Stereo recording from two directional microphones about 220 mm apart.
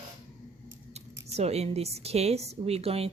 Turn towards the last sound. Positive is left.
turn(degrees=-25)  # may be behind; listen again after turning